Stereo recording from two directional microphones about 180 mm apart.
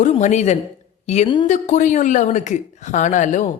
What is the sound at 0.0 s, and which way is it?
A woman's voice, 40° left (ahead or behind).